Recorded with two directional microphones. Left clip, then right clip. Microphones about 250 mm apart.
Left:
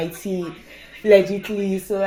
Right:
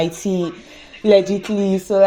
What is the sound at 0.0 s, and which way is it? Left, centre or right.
Speech, right.